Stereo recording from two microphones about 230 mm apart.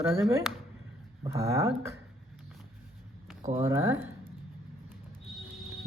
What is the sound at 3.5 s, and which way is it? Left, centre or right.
Speech, centre.